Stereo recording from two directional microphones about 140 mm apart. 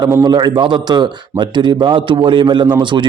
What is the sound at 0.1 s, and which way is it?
A man's voice, 25° right (ahead or behind).